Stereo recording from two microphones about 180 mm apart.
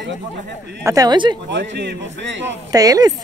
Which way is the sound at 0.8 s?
20° right (ahead or behind).